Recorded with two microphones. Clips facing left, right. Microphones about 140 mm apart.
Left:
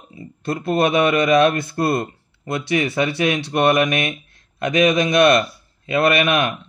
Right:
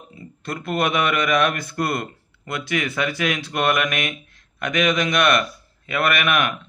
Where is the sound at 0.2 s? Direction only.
20° left (ahead or behind).